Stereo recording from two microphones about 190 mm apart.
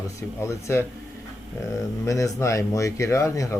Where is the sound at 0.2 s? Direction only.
15° left (ahead or behind).